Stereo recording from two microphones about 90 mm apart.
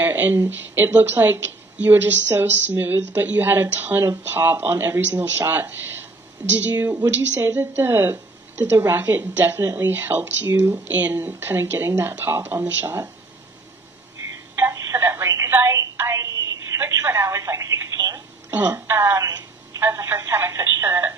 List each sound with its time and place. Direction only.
0.0 s a woman's voice: 20° right (ahead or behind)
14.5 s telephone: 25° right (ahead or behind)
18.5 s a woman's voice: 25° right (ahead or behind)
19.2 s telephone: 40° right (ahead or behind)
19.8 s telephone: 30° right (ahead or behind)